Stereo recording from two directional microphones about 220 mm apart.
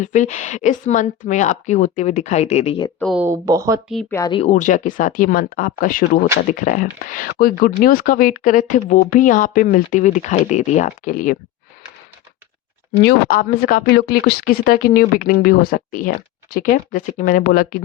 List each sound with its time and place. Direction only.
0.0 s speech: 35° left (ahead or behind)
3.0 s speech: centre (ahead or behind)
3.2 s speech: 15° right (ahead or behind)
4.1 s speech: 20° left (ahead or behind); by 11.3 s 35° left (ahead or behind)
13.0 s speech: 45° left (ahead or behind)